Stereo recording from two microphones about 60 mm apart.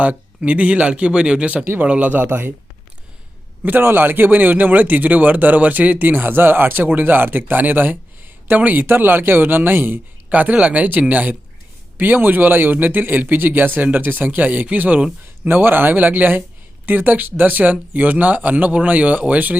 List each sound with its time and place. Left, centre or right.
0.0 s speech: right
3.6 s a man's voice: right
10.2 s a man's voice: right